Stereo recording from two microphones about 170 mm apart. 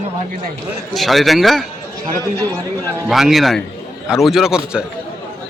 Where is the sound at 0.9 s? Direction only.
Centre (ahead or behind).